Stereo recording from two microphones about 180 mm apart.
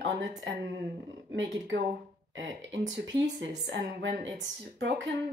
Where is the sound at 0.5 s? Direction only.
90° right.